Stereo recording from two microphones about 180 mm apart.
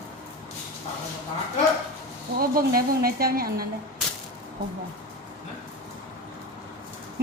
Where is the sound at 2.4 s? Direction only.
55° right (ahead or behind).